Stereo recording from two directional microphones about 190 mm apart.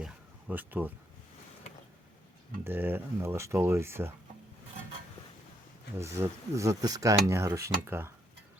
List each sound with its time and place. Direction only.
0.0 s a sound: 10° right (ahead or behind)
2.6 s speech: 10° right (ahead or behind)
6.0 s speech: 15° right (ahead or behind)